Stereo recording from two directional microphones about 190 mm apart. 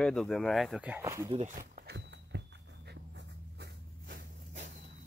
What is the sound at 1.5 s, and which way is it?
Walk, 55° right (ahead or behind).